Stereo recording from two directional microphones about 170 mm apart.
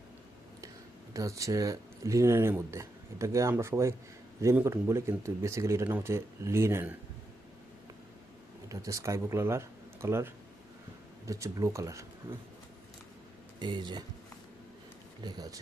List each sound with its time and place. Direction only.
1.1 s speech: 20° right (ahead or behind)
8.7 s speech: 20° right (ahead or behind)
13.6 s speech: 25° right (ahead or behind)
15.2 s speech: 25° right (ahead or behind)